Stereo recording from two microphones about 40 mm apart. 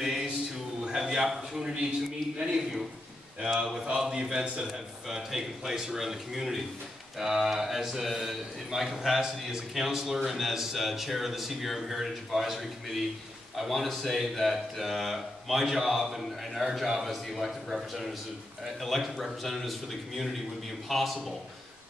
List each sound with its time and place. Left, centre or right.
0.8 s a man's voice: centre
2.3 s a man's voice: right; by 21.4 s centre